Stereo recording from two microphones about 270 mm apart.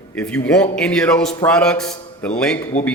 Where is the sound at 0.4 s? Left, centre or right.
Centre.